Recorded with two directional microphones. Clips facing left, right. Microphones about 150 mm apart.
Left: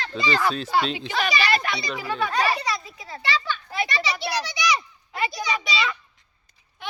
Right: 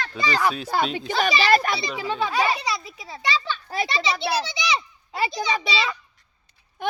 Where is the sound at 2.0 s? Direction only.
25° right (ahead or behind).